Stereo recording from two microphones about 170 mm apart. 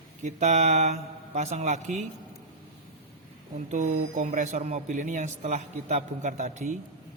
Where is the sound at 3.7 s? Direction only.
45° right (ahead or behind).